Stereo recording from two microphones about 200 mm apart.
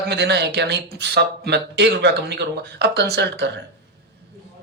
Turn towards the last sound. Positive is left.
turn(degrees=-55)  # may be behind; listen again after turning